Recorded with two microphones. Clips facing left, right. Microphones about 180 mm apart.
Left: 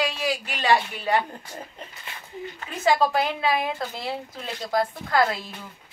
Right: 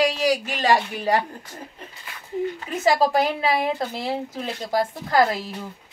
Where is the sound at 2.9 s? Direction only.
40° right (ahead or behind).